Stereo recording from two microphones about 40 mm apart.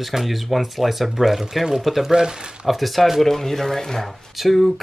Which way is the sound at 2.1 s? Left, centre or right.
Centre.